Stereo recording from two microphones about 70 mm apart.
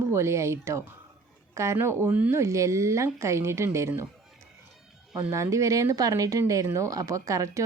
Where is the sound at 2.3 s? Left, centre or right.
Right.